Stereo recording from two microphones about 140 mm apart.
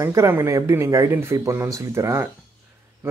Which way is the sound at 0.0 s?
20° right (ahead or behind).